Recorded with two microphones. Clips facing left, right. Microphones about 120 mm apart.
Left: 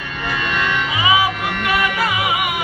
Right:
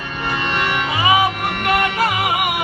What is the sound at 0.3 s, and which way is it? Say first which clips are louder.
Music: even; 25° right (ahead or behind).